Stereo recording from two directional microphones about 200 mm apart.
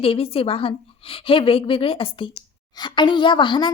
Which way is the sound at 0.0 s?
30° left (ahead or behind).